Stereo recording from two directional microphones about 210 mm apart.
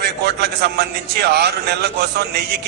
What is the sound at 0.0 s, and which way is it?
A man's voice, 50° right (ahead or behind).